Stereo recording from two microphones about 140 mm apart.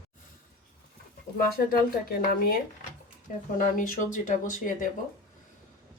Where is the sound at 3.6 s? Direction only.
70° left (ahead or behind).